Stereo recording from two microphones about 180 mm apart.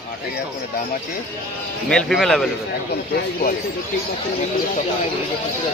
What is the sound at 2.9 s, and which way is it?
Speech, 55° left (ahead or behind).